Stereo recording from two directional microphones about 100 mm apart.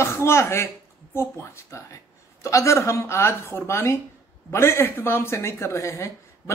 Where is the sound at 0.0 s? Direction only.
25° left (ahead or behind).